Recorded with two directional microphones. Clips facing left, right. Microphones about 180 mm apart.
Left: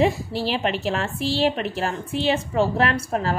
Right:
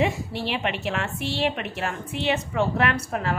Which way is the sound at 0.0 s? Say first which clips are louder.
Left 4 dB; 35° left (ahead or behind).